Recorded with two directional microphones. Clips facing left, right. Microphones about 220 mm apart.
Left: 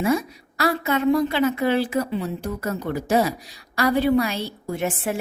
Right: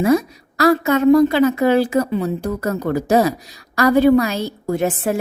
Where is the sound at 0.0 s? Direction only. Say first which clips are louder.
Right 6 dB; 40° right (ahead or behind).